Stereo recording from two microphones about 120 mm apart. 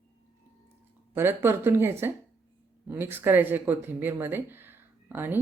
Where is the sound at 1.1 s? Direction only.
20° right (ahead or behind).